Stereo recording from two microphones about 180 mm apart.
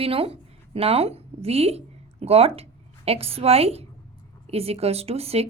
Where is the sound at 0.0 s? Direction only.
30° right (ahead or behind).